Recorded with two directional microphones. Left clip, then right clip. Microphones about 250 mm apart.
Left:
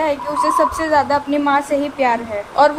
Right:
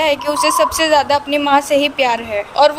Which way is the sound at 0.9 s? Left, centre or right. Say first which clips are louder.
Right 2 dB; right.